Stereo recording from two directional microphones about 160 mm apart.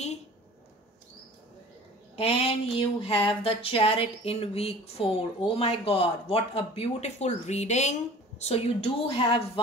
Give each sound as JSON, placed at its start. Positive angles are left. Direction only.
{"t": 2.1, "sound": "speech", "side_deg": 35}